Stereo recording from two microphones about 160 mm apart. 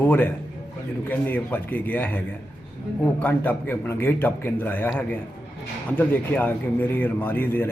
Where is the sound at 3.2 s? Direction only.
10° left (ahead or behind).